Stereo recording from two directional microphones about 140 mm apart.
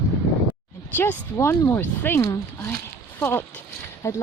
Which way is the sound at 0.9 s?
15° left (ahead or behind).